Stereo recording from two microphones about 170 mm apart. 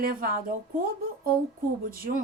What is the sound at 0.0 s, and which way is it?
Speech, 60° right (ahead or behind).